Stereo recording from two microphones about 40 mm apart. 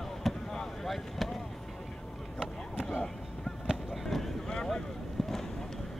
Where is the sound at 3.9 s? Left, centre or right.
Centre.